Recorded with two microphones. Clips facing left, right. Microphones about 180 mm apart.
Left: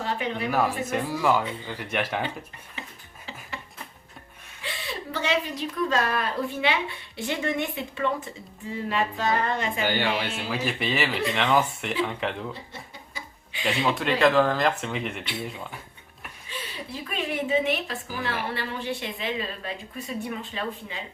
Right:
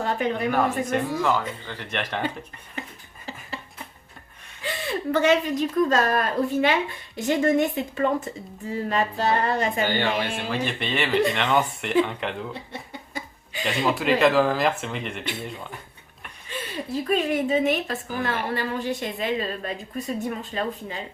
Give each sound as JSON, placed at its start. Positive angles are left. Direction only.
{"t": 0.0, "sound": "a sound", "side_deg": -45}
{"t": 0.5, "sound": "speech", "side_deg": 5}
{"t": 4.6, "sound": "a woman's voice", "side_deg": -50}
{"t": 8.7, "sound": "a sound", "side_deg": -40}
{"t": 10.5, "sound": "speech", "side_deg": 5}
{"t": 13.1, "sound": "chuckle", "side_deg": -40}
{"t": 13.7, "sound": "speech", "side_deg": 0}
{"t": 16.5, "sound": "a woman's voice", "side_deg": -40}